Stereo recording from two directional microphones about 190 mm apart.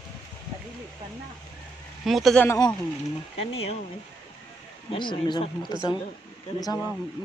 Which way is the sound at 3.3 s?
30° left (ahead or behind).